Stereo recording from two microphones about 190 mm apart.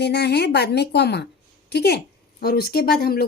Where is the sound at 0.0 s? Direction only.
60° left (ahead or behind).